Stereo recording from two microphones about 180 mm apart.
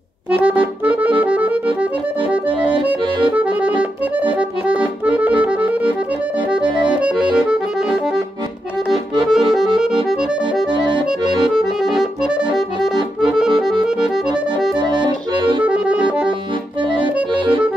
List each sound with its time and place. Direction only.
1.2 s accordion: 10° right (ahead or behind)
3.3 s accordion: 5° right (ahead or behind)
7.3 s accordion: 5° right (ahead or behind)
11.5 s accordion: centre (ahead or behind)
14.8 s accordion: 25° right (ahead or behind)
15.6 s accordion: 5° right (ahead or behind)
17.0 s accordion: 25° right (ahead or behind)